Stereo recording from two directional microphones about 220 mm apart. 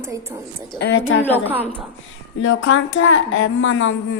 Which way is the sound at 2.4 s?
60° left (ahead or behind).